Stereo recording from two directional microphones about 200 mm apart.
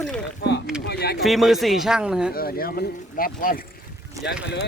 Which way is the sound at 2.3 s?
50° left (ahead or behind).